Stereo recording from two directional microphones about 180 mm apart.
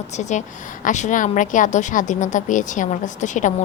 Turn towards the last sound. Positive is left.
turn(degrees=45)  # may be behind; listen again after turning